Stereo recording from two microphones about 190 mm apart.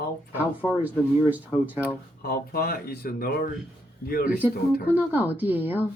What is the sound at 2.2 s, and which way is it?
Speech, 50° left (ahead or behind).